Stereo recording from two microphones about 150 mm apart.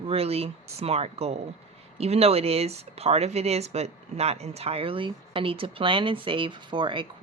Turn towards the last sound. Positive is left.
turn(degrees=-35)  # may be behind; listen again after turning